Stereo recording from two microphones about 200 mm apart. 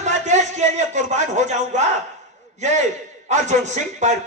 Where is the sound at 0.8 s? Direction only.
35° right (ahead or behind).